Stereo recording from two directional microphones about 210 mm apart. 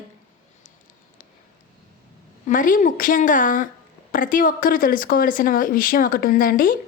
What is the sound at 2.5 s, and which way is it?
Speech, 40° left (ahead or behind).